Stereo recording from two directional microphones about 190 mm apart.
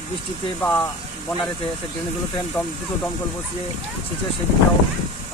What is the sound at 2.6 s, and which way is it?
Speech, 10° left (ahead or behind).